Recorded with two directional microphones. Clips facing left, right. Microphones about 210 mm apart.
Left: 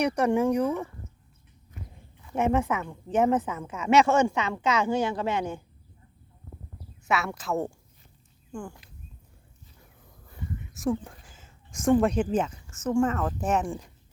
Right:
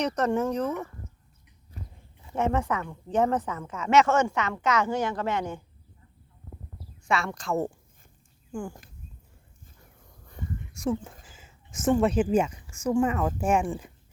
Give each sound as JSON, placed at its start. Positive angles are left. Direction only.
{"t": 0.0, "sound": "a woman's voice", "side_deg": 10}
{"t": 1.7, "sound": "a sound", "side_deg": -35}
{"t": 2.3, "sound": "a woman's voice", "side_deg": 10}
{"t": 7.0, "sound": "a woman's voice", "side_deg": 5}
{"t": 10.2, "sound": "speech", "side_deg": 5}